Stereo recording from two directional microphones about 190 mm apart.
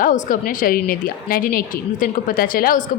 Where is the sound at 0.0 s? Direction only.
45° left (ahead or behind).